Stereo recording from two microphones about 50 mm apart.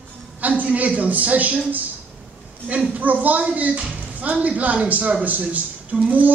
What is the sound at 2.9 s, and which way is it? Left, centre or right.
A man's voice, right.